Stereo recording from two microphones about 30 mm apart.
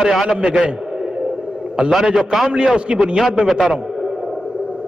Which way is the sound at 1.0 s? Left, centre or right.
Right.